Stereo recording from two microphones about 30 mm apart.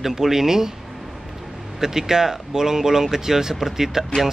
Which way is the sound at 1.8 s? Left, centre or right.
Centre.